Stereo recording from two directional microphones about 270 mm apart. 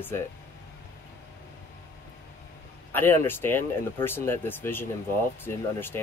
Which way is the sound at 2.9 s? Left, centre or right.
Centre.